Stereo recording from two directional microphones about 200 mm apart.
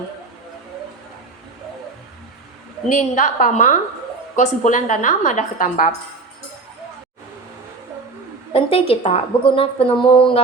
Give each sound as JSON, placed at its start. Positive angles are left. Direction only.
{"t": 2.9, "sound": "a woman's voice", "side_deg": 40}
{"t": 8.5, "sound": "a woman's voice", "side_deg": 30}